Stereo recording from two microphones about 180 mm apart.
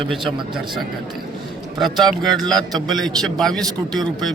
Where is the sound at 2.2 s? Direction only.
Centre (ahead or behind).